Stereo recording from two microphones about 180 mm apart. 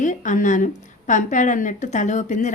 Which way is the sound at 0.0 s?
45° left (ahead or behind).